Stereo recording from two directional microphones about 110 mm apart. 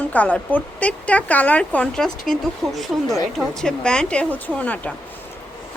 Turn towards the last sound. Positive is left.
turn(degrees=15)  # may be behind; listen again after turning